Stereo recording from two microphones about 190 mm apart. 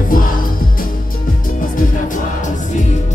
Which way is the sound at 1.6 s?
45° left (ahead or behind).